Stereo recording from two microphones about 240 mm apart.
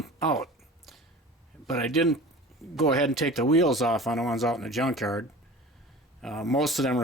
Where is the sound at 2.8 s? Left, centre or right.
Centre.